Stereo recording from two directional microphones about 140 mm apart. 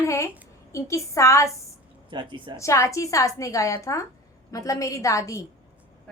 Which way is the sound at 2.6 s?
20° left (ahead or behind).